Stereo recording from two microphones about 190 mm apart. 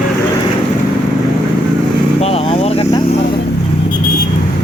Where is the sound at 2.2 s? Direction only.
30° left (ahead or behind).